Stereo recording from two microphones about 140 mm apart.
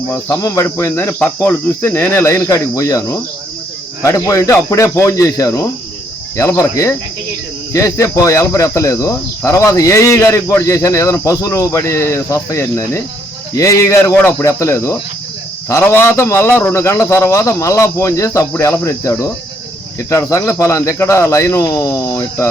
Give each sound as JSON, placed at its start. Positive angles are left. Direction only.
{"t": 0.1, "sound": "speech", "side_deg": 25}